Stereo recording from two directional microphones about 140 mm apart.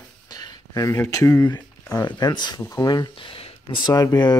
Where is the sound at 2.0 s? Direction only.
30° left (ahead or behind).